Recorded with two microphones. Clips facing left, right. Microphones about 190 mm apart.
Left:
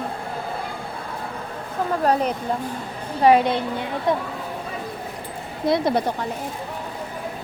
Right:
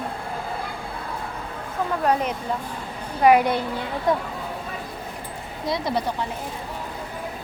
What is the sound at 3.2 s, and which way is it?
Speech, 25° left (ahead or behind).